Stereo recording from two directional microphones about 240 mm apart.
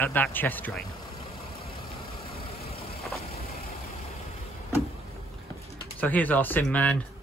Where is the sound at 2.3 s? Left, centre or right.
Left.